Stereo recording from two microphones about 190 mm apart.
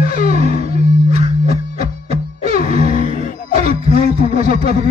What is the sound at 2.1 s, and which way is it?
Music, 35° right (ahead or behind).